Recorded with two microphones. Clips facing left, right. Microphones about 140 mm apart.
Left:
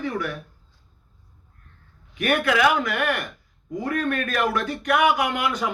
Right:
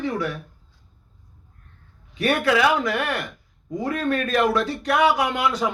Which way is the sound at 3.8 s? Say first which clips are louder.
Right 1 dB; 25° right (ahead or behind).